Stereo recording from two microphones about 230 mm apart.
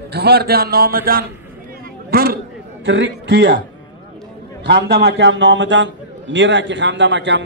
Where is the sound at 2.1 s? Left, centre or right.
Right.